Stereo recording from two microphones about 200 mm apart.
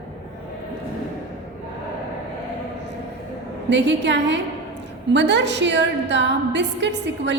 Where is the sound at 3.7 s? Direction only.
60° right (ahead or behind).